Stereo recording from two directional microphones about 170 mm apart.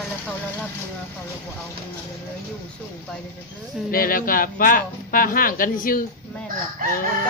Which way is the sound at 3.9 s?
55° left (ahead or behind).